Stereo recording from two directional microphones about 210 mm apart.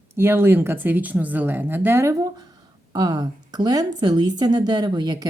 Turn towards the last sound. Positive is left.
turn(degrees=-20)  # may be behind; listen again after turning